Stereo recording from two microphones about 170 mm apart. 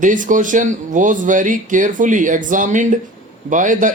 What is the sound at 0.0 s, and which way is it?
Speech, 50° right (ahead or behind).